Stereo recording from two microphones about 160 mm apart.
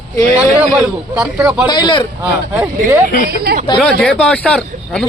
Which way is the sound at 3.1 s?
60° left (ahead or behind).